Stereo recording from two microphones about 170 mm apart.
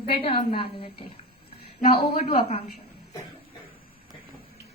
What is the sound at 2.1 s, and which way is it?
Speech, 35° left (ahead or behind).